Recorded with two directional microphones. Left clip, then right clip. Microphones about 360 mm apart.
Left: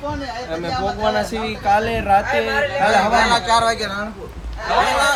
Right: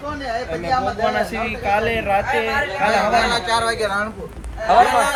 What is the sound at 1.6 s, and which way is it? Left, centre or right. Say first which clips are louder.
Speech: left 3 dB; centre.